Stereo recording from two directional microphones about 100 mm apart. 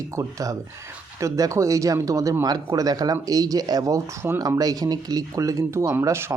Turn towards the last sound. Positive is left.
turn(degrees=-25)  # may be behind; listen again after turning